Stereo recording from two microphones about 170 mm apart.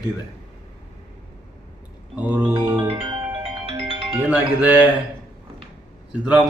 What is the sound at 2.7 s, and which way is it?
Music, 30° right (ahead or behind).